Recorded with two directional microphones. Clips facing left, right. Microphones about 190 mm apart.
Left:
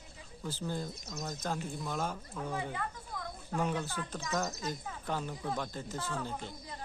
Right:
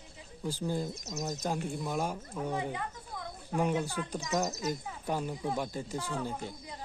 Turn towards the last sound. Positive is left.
turn(degrees=-15)  # may be behind; listen again after turning